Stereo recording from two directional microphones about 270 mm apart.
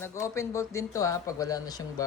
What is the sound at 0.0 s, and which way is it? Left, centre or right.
Speech, centre.